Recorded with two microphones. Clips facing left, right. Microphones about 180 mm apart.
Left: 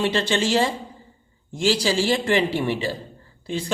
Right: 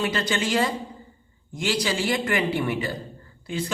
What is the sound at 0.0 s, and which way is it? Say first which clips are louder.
Speech: left 4 dB; 25° left (ahead or behind).